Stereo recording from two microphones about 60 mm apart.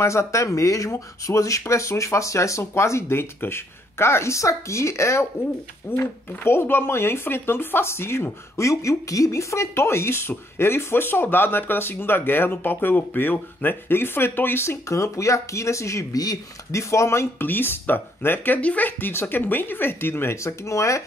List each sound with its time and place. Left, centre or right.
0.0 s speech: left
5.9 s speech: left
16.7 s speech: left
17.4 s speech: left
20.4 s speech: left